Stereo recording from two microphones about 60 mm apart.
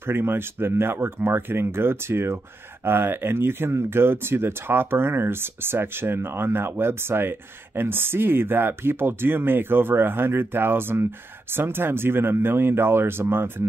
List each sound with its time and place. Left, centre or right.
0.0 s speech: right